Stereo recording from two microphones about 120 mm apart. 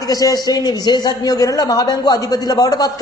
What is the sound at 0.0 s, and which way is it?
Speech, 30° left (ahead or behind).